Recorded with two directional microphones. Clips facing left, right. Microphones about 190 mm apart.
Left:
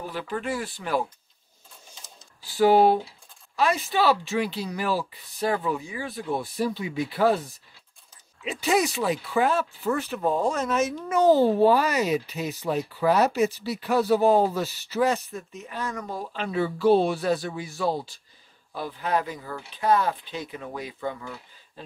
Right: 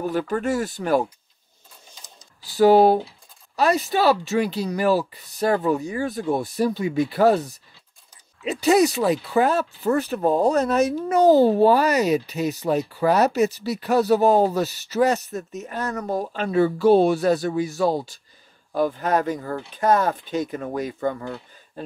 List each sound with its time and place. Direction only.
0.0 s speech: 45° right (ahead or behind)
2.4 s speech: 40° right (ahead or behind)